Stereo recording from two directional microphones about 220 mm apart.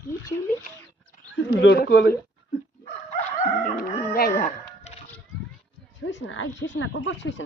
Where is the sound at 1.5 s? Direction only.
45° left (ahead or behind).